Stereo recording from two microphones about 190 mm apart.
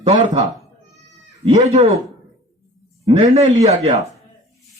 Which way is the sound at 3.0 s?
35° right (ahead or behind).